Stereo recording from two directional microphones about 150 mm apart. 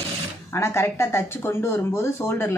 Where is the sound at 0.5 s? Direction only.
15° left (ahead or behind).